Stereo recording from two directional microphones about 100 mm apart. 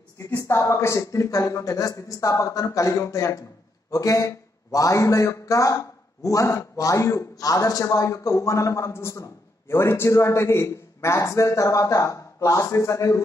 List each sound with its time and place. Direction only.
0.4 s speech: 30° left (ahead or behind)